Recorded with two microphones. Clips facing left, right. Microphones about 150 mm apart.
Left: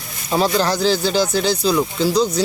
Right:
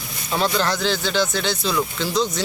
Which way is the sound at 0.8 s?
40° left (ahead or behind).